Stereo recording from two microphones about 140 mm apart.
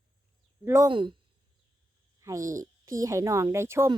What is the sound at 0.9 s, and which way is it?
Speech, 35° right (ahead or behind).